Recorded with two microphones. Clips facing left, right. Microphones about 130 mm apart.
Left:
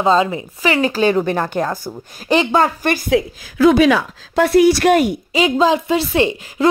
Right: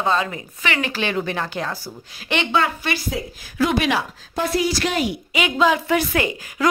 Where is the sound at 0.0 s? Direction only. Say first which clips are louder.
Left 7 dB; 25° left (ahead or behind).